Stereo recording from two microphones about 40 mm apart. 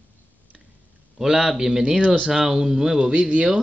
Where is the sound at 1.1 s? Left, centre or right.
Centre.